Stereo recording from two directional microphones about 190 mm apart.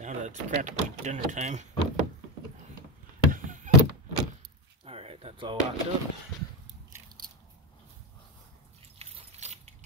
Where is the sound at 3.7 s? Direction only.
40° right (ahead or behind).